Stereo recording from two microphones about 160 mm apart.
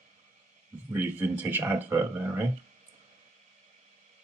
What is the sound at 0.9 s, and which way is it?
Speech, 10° right (ahead or behind).